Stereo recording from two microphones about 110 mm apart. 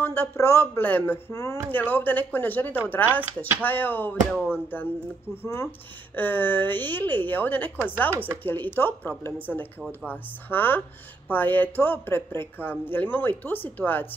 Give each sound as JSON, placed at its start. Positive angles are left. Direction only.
{"t": 0.0, "sound": "speech", "side_deg": 20}
{"t": 1.3, "sound": "speech", "side_deg": 30}
{"t": 1.7, "sound": "speech", "side_deg": 15}
{"t": 8.1, "sound": "speech", "side_deg": -20}
{"t": 8.5, "sound": "speech", "side_deg": 20}